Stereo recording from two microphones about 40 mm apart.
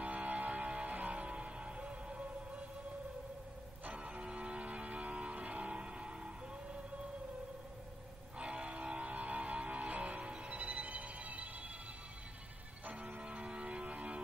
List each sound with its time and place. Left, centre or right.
0.0 s music: right
3.8 s music: right
4.3 s vehicle: right
8.4 s music: right
12.8 s music: right